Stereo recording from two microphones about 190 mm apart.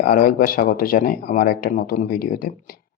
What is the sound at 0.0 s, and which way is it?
Speech, 50° left (ahead or behind).